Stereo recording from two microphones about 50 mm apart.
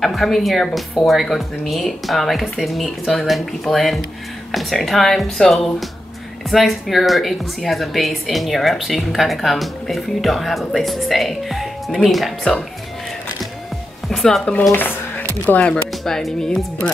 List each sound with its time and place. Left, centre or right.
0.0 s a woman's voice: centre
14.0 s a woman's voice: centre
14.7 s a sound: left
16.0 s a woman's voice: centre